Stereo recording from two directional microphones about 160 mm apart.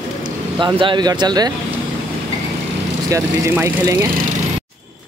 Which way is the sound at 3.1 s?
20° right (ahead or behind).